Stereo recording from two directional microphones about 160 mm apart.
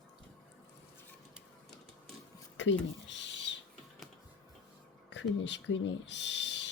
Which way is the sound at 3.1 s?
90° left.